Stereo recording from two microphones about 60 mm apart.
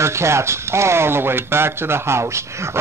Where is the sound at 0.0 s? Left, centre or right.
Right.